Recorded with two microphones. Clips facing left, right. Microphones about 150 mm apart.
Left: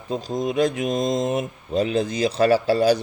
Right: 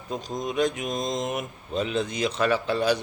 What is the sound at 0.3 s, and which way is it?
Speech, 35° left (ahead or behind).